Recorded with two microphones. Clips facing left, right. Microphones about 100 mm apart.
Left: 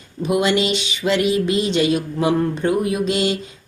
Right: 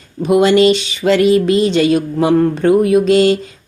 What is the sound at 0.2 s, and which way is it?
Speech, 40° right (ahead or behind).